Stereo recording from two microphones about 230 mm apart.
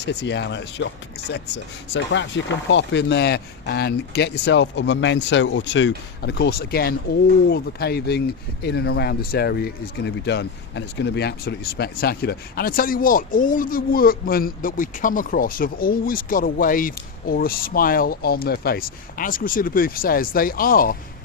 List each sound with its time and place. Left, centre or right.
0.0 s speech: left
1.9 s speech: left